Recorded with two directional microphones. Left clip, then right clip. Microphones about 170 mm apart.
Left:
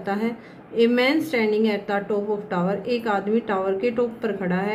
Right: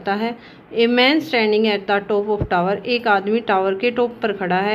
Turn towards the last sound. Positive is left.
turn(degrees=-30)  # may be behind; listen again after turning